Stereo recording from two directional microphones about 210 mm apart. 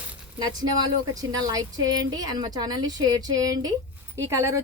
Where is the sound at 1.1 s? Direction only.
15° right (ahead or behind).